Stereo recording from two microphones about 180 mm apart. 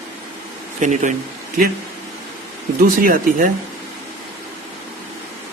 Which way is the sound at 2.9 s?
55° right (ahead or behind).